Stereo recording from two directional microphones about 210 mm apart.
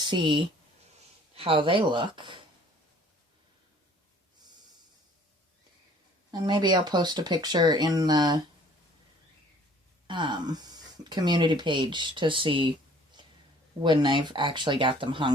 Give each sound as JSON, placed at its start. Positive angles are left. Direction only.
{"t": 0.0, "sound": "speech", "side_deg": -20}
{"t": 6.3, "sound": "speech", "side_deg": -20}
{"t": 10.1, "sound": "speech", "side_deg": -20}
{"t": 13.8, "sound": "speech", "side_deg": -20}